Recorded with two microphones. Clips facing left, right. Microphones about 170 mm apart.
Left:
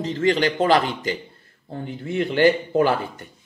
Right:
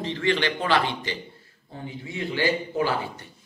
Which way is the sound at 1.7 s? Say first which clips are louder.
Left 7 dB; 60° left (ahead or behind).